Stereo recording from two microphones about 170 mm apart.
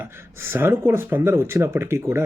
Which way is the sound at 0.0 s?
15° right (ahead or behind).